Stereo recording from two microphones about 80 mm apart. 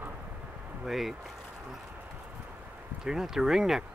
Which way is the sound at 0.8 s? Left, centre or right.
Centre.